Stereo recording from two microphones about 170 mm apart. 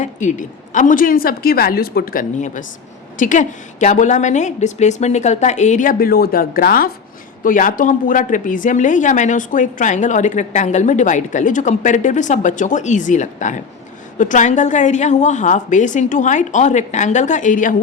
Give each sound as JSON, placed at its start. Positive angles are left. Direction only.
{"t": 0.0, "sound": "a woman's voice", "side_deg": 45}